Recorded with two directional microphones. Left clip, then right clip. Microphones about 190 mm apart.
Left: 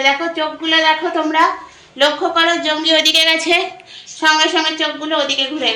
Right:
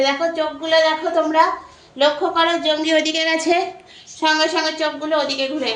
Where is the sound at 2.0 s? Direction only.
10° left (ahead or behind).